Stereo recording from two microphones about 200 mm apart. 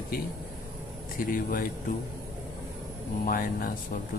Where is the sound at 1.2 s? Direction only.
45° left (ahead or behind).